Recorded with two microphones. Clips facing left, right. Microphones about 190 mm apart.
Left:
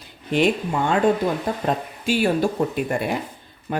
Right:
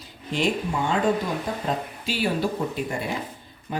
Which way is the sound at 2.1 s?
50° left (ahead or behind).